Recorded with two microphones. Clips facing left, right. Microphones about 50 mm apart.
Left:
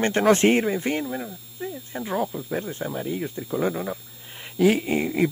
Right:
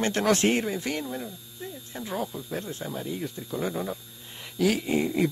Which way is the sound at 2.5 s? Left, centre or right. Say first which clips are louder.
Left 5 dB; left.